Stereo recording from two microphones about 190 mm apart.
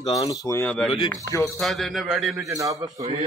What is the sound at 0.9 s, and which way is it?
Speech, 30° left (ahead or behind).